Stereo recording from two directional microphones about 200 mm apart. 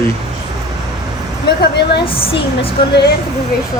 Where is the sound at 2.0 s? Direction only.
25° left (ahead or behind).